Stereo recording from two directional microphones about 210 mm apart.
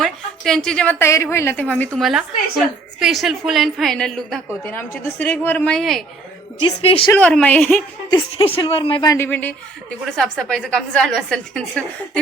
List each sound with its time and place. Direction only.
0.0 s a woman's voice: centre (ahead or behind)
6.7 s speech: 25° left (ahead or behind)
7.1 s a woman's voice: 5° left (ahead or behind)
8.6 s speech: 25° left (ahead or behind)
9.1 s a woman's voice: 10° left (ahead or behind)